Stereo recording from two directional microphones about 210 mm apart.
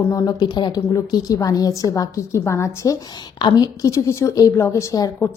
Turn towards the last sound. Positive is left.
turn(degrees=15)  # may be behind; listen again after turning